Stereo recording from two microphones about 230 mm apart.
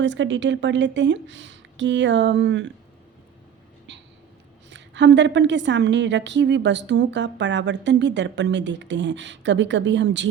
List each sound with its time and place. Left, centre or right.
0.0 s a woman's voice: right
3.9 s a sound: right
4.7 s a woman's voice: right